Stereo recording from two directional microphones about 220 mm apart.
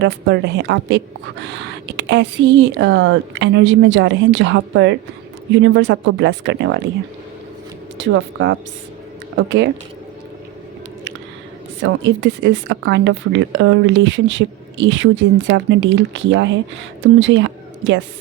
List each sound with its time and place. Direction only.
0.0 s a woman's voice: 50° right (ahead or behind)
7.9 s a woman's voice: 55° right (ahead or behind)
11.8 s a woman's voice: 55° right (ahead or behind)